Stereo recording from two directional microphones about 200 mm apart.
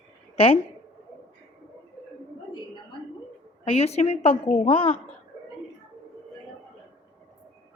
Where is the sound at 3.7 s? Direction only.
30° left (ahead or behind).